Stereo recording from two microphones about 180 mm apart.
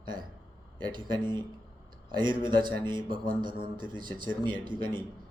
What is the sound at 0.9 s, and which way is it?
Speech, 25° right (ahead or behind).